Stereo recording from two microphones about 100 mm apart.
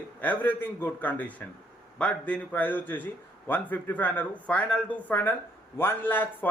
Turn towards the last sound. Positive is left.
turn(degrees=20)  # may be behind; listen again after turning